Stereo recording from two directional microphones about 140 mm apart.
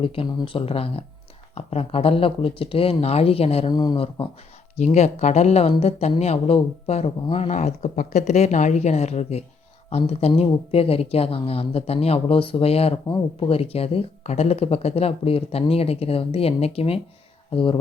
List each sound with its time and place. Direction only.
0.0 s speech: 40° left (ahead or behind)
3.7 s speech: 30° left (ahead or behind)
4.8 s speech: 50° left (ahead or behind)